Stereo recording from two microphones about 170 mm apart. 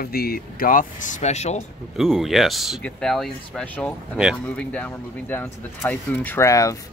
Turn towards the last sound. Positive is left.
turn(degrees=20)  # may be behind; listen again after turning